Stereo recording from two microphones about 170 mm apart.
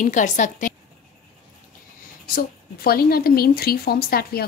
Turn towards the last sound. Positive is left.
turn(degrees=65)  # may be behind; listen again after turning